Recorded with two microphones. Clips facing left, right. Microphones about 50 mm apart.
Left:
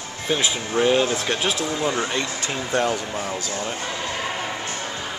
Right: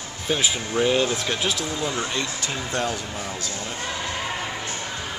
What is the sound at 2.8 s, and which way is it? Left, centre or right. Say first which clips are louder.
Speech: left 4 dB; left.